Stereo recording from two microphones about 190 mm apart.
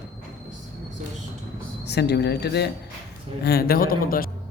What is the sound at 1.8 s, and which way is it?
Speech, 60° left (ahead or behind).